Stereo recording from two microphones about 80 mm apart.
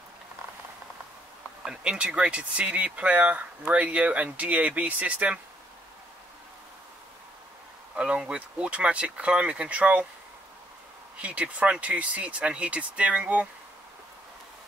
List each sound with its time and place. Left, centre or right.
1.6 s speech: centre
7.9 s speech: centre
11.1 s speech: centre